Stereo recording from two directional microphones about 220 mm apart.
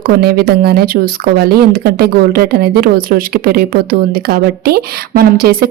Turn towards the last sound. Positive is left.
turn(degrees=-45)  # may be behind; listen again after turning